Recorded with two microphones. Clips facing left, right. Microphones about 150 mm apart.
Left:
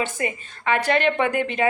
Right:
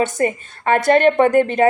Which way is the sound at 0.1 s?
45° right (ahead or behind).